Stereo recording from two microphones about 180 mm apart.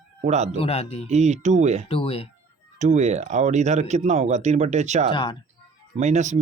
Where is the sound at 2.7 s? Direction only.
40° right (ahead or behind).